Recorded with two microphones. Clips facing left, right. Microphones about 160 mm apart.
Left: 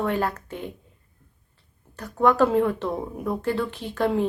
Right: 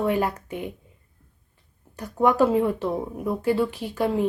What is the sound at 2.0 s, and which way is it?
A woman's voice, 10° right (ahead or behind).